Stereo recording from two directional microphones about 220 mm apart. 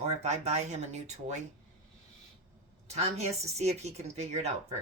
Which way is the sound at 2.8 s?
30° right (ahead or behind).